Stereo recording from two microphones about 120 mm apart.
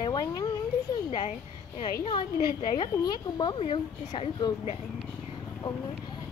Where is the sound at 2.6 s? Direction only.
30° left (ahead or behind).